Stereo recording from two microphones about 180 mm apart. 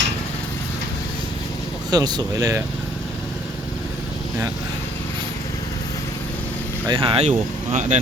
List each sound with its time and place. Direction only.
1.9 s speech: 20° right (ahead or behind)
6.8 s speech: 30° right (ahead or behind)